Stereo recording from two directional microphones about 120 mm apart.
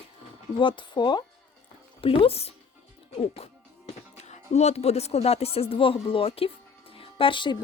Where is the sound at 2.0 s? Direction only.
55° left (ahead or behind).